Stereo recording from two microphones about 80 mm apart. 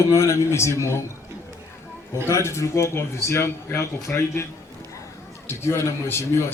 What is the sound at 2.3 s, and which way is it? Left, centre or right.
A man's voice, left.